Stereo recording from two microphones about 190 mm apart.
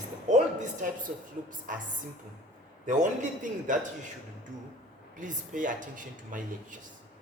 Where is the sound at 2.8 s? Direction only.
40° right (ahead or behind).